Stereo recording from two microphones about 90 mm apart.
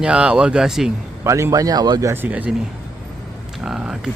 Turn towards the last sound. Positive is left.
turn(degrees=-10)  # may be behind; listen again after turning